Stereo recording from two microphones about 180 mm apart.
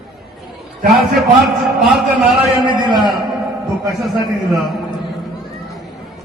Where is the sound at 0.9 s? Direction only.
Centre (ahead or behind).